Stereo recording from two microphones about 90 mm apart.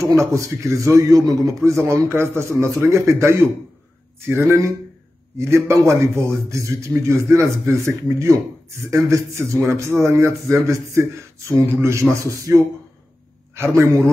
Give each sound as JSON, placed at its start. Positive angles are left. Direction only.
{"t": 0.2, "sound": "a man's voice", "side_deg": -35}